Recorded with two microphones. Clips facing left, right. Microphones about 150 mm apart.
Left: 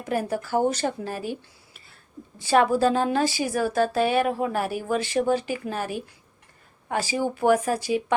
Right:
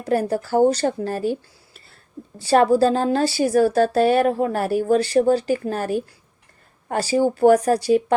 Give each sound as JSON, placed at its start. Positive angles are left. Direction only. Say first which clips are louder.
{"t": 0.0, "sound": "a woman's voice", "louder": "right 6 dB", "side_deg": -40}
{"t": 2.4, "sound": "a woman's voice", "louder": "right 4 dB", "side_deg": -35}